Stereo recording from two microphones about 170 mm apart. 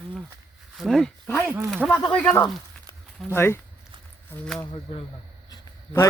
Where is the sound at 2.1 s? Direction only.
10° left (ahead or behind).